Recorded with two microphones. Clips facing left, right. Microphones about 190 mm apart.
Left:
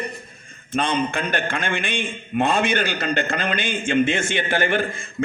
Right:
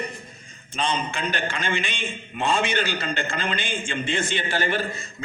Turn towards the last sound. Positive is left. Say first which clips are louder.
# left 4 dB
turn(degrees=55)  # may be behind; listen again after turning